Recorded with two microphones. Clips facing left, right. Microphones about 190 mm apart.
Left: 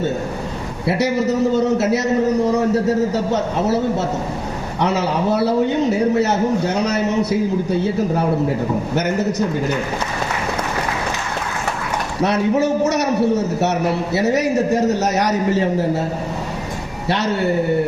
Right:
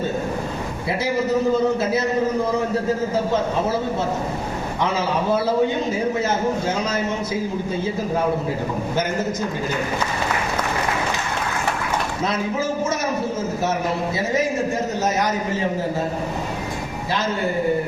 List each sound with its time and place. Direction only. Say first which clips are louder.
0.9 s a man's voice: left 4 dB; 70° left (ahead or behind)
12.2 s a man's voice: left 9 dB; 70° left (ahead or behind)